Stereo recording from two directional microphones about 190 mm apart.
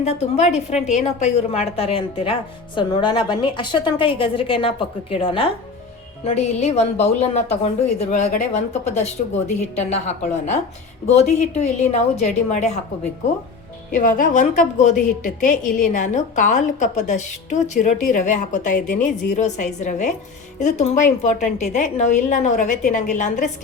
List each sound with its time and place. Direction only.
0.0 s a woman's voice: 35° left (ahead or behind)
11.2 s a woman's voice: 35° left (ahead or behind)
13.9 s a woman's voice: 45° left (ahead or behind)